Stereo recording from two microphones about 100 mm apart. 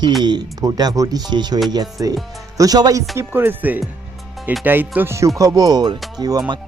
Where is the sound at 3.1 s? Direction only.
20° right (ahead or behind).